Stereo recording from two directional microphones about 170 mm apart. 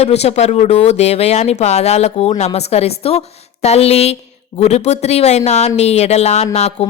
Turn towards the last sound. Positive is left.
turn(degrees=40)  # may be behind; listen again after turning